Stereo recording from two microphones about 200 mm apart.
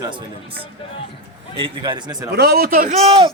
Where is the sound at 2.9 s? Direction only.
30° right (ahead or behind).